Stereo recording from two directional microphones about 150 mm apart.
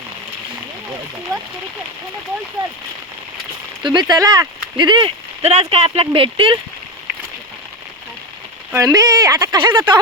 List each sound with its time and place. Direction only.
3.8 s speech: 30° right (ahead or behind)
8.7 s speech: 20° right (ahead or behind)